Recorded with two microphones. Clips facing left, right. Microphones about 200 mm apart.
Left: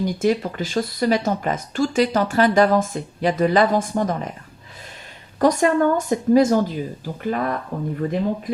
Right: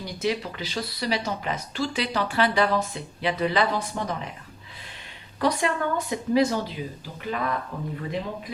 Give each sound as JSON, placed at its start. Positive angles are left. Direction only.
{"t": 0.0, "sound": "speech", "side_deg": 50}
{"t": 5.4, "sound": "speech", "side_deg": 45}